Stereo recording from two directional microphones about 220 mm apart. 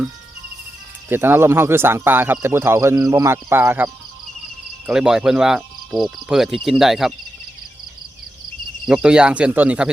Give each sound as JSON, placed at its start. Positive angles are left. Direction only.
{"t": 1.1, "sound": "speech", "side_deg": -10}
{"t": 4.9, "sound": "cricket", "side_deg": -5}
{"t": 8.9, "sound": "cricket", "side_deg": -5}